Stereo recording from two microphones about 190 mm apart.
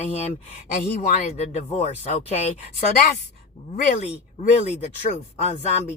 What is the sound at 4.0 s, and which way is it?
Speech, 35° left (ahead or behind).